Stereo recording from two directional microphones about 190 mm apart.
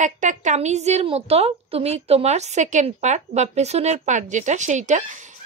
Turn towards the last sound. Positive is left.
turn(degrees=-40)  # may be behind; listen again after turning